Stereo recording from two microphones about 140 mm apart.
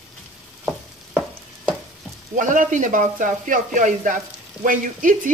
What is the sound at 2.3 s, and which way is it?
Speech, 70° right (ahead or behind).